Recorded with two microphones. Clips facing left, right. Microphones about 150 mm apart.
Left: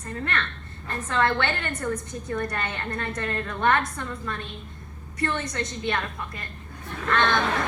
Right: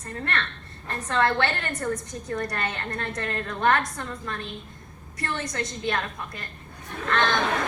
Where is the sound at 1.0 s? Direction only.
40° right (ahead or behind).